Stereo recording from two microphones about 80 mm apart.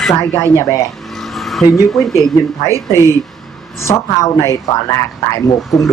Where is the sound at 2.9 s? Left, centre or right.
Left.